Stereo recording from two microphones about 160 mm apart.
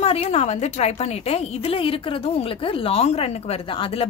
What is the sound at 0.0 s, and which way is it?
A woman's voice, 40° left (ahead or behind).